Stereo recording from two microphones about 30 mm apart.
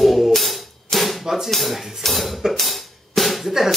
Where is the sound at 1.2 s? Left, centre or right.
Centre.